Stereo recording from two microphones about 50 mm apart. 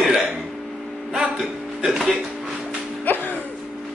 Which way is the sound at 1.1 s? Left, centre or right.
Centre.